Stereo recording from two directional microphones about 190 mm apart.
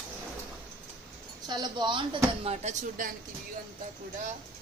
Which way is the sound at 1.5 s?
25° right (ahead or behind).